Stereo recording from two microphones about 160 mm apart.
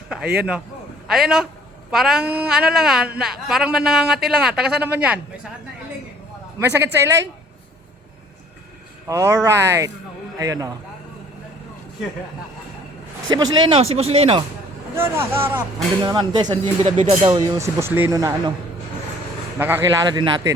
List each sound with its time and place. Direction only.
0.3 s a woman's voice: 10° right (ahead or behind)
6.6 s speech: 15° right (ahead or behind)
9.0 s speech: 20° right (ahead or behind)
13.3 s speech: 25° right (ahead or behind)
14.9 s speech: 15° right (ahead or behind)
16.0 s speech: 25° right (ahead or behind)
17.6 s speech: 15° right (ahead or behind)
19.5 s speech: 15° right (ahead or behind)
20.1 s speech: 25° right (ahead or behind)